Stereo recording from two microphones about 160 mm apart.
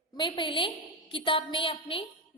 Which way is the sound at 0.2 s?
30° left (ahead or behind).